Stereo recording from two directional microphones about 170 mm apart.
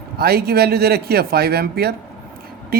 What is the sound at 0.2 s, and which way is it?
Speech, 65° right (ahead or behind).